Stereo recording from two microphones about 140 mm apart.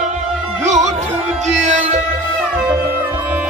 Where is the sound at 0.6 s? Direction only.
55° right (ahead or behind).